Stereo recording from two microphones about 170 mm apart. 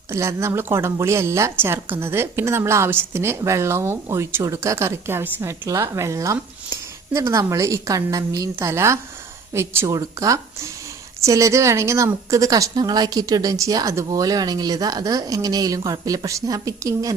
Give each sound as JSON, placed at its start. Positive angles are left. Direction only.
{"t": 0.1, "sound": "a woman's voice", "side_deg": -15}